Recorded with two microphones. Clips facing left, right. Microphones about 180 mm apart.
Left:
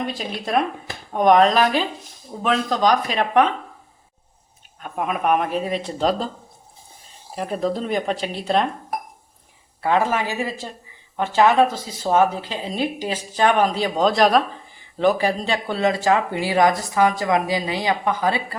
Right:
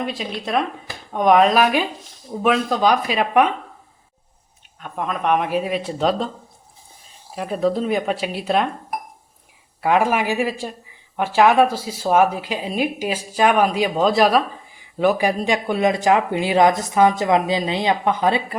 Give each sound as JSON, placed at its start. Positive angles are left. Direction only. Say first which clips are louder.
{"t": 0.0, "sound": "speech", "louder": "right 1 dB", "side_deg": 0}
{"t": 4.8, "sound": "speech", "louder": "left 1 dB", "side_deg": 5}
{"t": 7.3, "sound": "speech", "louder": "right 3 dB", "side_deg": 0}
{"t": 9.8, "sound": "speech", "louder": "right 2 dB", "side_deg": -15}